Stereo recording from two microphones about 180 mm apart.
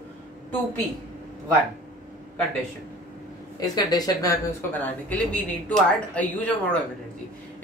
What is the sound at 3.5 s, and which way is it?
Speech, 20° left (ahead or behind).